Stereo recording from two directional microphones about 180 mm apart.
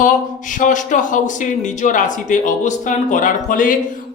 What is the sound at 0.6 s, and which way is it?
Speech, 45° left (ahead or behind).